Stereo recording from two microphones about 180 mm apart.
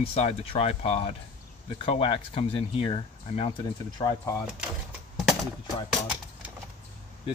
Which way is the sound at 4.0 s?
20° left (ahead or behind).